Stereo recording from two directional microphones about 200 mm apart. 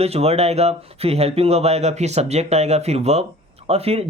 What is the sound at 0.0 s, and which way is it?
Speech, 30° right (ahead or behind).